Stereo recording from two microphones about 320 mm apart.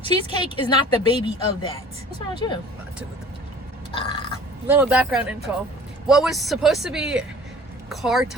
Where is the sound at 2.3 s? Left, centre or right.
Centre.